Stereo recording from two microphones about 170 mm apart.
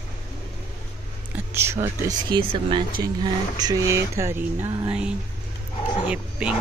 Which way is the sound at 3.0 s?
25° right (ahead or behind).